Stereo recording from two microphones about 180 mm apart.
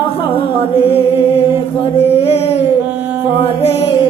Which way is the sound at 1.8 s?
35° left (ahead or behind).